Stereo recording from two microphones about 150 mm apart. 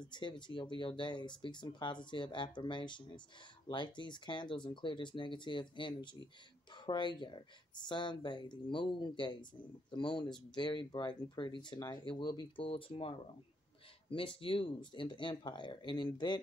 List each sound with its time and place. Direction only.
0.0 s speech: 30° left (ahead or behind)